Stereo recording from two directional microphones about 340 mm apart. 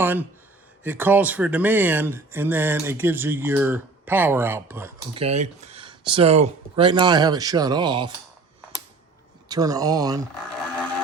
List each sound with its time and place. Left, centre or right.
0.0 s speech: centre
5.2 s speech: centre
9.5 s speech: centre